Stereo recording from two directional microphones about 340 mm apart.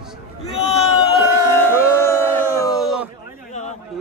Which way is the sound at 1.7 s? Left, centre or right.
Centre.